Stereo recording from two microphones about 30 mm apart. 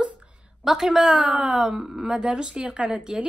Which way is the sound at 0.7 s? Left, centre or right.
Centre.